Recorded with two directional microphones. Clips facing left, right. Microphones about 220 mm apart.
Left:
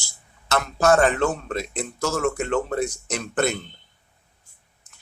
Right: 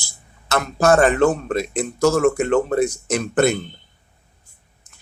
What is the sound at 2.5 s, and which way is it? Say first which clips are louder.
Speech: right 6 dB; 45° right (ahead or behind).